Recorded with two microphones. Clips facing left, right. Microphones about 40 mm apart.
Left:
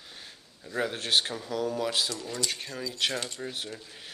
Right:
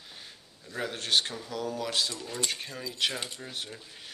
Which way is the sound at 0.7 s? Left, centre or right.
Centre.